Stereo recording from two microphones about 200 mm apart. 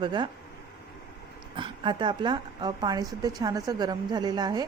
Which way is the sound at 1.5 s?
25° right (ahead or behind).